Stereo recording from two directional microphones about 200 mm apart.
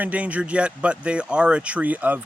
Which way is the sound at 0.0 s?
5° right (ahead or behind).